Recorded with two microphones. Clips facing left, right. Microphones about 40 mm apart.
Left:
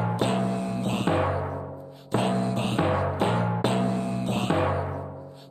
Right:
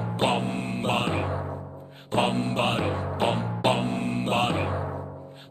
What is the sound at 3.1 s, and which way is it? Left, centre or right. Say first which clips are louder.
Music: left 1 dB; right.